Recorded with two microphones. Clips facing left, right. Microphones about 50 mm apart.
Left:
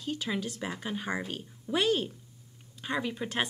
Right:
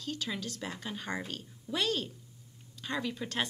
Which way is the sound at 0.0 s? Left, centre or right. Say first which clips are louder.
Left 4 dB; centre.